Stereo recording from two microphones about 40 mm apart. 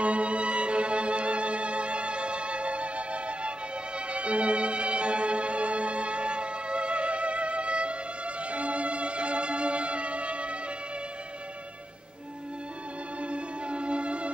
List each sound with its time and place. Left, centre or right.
0.0 s music: right
13.2 s music: right